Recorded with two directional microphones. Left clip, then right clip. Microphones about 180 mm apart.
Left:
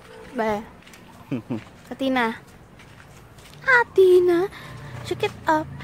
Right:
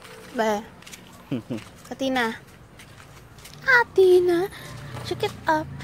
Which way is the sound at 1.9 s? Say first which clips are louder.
Left 2 dB; 15° left (ahead or behind).